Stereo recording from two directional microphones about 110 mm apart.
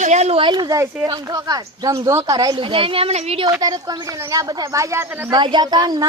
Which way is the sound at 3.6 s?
35° right (ahead or behind).